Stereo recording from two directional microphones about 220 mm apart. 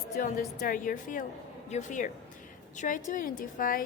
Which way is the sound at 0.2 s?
40° left (ahead or behind).